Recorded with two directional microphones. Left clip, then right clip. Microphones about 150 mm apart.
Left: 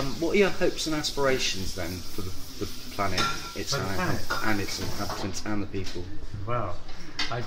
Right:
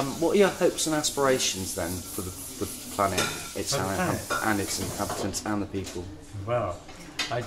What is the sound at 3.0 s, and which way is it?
Speech, 20° right (ahead or behind).